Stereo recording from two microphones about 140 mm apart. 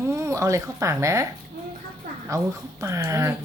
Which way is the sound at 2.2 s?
25° right (ahead or behind).